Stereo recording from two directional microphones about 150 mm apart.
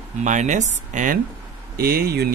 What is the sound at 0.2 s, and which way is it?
Speech, 55° right (ahead or behind).